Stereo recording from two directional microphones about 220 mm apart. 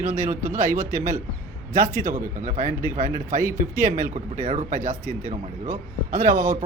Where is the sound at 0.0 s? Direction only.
10° right (ahead or behind).